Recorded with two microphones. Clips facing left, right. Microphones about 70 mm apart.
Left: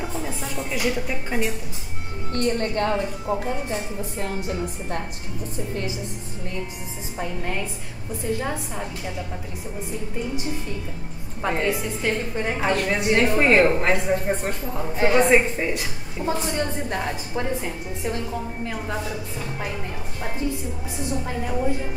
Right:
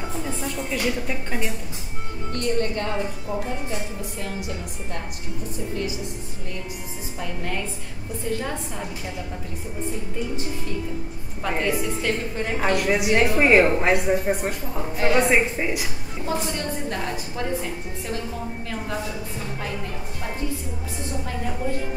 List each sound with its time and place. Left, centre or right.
0.6 s speech: centre
2.3 s speech: left
8.3 s speech: centre
11.4 s speech: centre
12.7 s a woman's voice: centre
16.3 s a woman's voice: left